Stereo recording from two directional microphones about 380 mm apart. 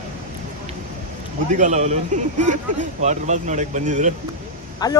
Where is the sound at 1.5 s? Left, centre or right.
Centre.